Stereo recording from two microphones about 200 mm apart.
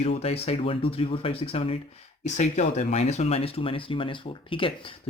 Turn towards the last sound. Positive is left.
turn(degrees=25)  # may be behind; listen again after turning